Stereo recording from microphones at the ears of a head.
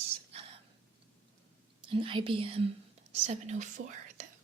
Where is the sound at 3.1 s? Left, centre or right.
Right.